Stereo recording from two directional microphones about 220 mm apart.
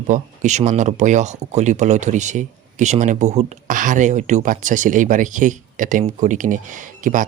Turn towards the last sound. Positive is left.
turn(degrees=-35)  # may be behind; listen again after turning